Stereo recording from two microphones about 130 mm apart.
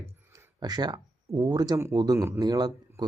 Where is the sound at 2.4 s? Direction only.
30° right (ahead or behind).